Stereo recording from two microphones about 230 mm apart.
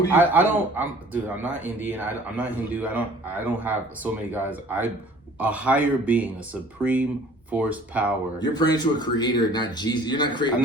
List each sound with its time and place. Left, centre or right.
0.1 s speech: centre
8.5 s a man's voice: centre